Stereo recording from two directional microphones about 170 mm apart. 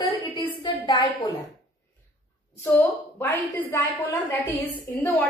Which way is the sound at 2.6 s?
10° left (ahead or behind).